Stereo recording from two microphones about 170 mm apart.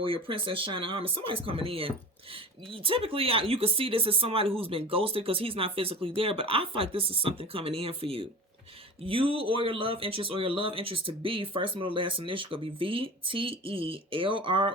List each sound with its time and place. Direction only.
0.0 s speech: 30° right (ahead or behind)